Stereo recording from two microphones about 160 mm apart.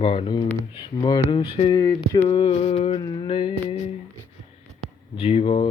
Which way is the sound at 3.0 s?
25° left (ahead or behind).